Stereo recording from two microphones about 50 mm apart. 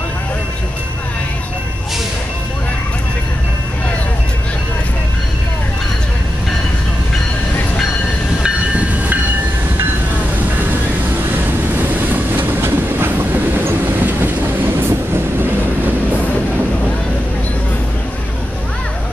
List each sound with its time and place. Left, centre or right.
11.3 s waves: right
12.6 s train: right